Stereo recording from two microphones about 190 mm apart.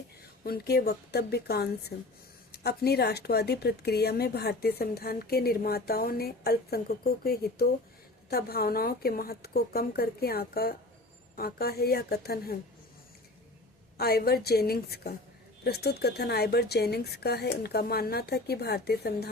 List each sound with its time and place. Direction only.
0.4 s a woman's voice: 55° left (ahead or behind)
14.0 s a woman's voice: 55° left (ahead or behind)